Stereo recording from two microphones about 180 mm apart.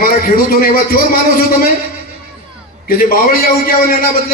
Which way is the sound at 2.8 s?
55° left (ahead or behind).